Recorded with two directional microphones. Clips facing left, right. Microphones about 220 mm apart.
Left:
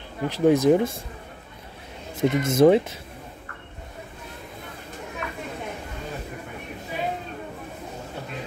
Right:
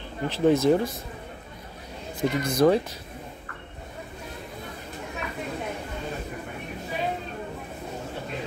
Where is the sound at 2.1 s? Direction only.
25° left (ahead or behind).